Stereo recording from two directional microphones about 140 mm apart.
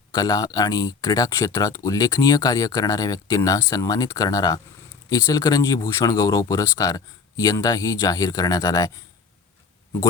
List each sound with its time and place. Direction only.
0.1 s speech: 25° left (ahead or behind)